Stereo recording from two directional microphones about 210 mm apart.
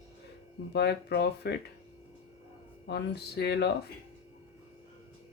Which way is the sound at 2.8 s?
50° left (ahead or behind).